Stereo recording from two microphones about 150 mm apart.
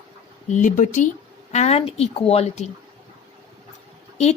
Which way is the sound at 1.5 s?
45° left (ahead or behind).